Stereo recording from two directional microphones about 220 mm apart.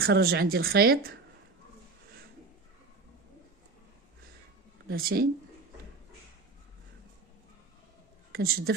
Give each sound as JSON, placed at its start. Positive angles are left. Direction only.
{"t": 0.0, "sound": "speech", "side_deg": -45}
{"t": 4.9, "sound": "speech", "side_deg": -40}
{"t": 8.3, "sound": "a woman's voice", "side_deg": -45}